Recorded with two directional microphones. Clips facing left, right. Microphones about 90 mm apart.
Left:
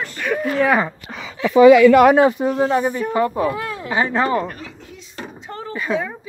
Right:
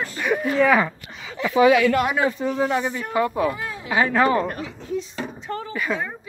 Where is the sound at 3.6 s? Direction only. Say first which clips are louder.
Left 4 dB; 65° left (ahead or behind).